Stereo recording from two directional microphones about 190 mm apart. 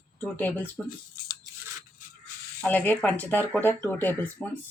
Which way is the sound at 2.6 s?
10° left (ahead or behind).